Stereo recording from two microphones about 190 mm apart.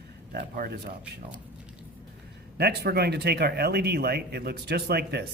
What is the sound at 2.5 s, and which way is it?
Speech, 55° right (ahead or behind).